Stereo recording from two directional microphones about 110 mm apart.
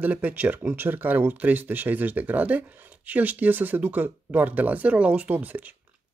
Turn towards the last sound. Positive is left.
turn(degrees=-15)  # may be behind; listen again after turning